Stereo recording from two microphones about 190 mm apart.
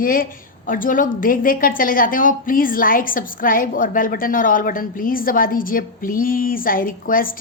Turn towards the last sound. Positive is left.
turn(degrees=45)  # may be behind; listen again after turning